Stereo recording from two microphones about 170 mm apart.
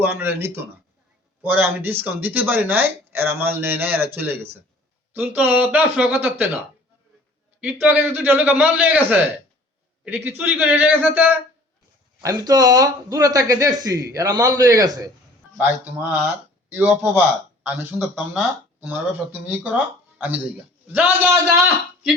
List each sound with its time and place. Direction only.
0.0 s speech: 10° right (ahead or behind)
7.6 s speech: 10° right (ahead or behind)
15.5 s speech: 10° right (ahead or behind)
20.9 s speech: 10° right (ahead or behind)